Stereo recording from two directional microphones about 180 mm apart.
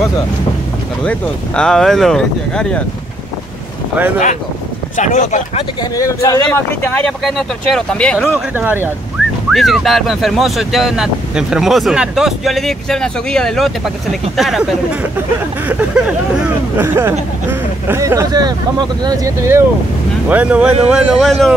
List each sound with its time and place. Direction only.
1.0 s speech: 5° left (ahead or behind)
4.9 s speech: 40° left (ahead or behind)
5.8 s speech: 20° left (ahead or behind)
8.5 s speech: 10° right (ahead or behind)
9.5 s speech: centre (ahead or behind)
16.4 s speech: 10° right (ahead or behind)